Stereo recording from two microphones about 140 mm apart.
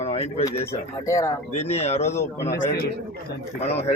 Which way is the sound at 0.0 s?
45° left (ahead or behind).